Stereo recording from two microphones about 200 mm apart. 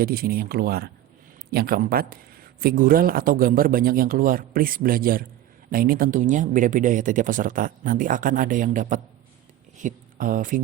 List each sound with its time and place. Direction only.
0.0 s speech: 50° right (ahead or behind)